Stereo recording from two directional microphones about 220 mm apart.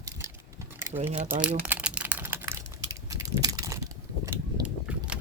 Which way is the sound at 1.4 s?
5° right (ahead or behind).